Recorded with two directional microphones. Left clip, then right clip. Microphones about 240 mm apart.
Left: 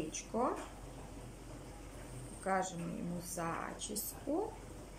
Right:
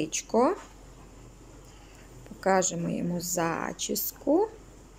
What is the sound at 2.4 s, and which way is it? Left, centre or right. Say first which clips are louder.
Speech: right 11 dB; right.